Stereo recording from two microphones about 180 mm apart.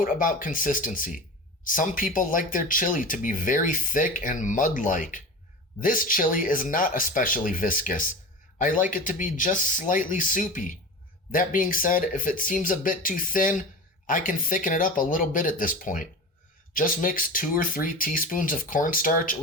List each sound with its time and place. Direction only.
0.0 s speech: 50° left (ahead or behind)